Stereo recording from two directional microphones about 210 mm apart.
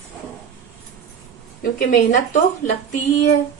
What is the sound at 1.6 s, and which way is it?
A woman's voice, 40° left (ahead or behind).